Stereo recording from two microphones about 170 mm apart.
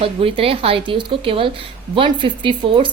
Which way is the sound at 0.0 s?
30° right (ahead or behind).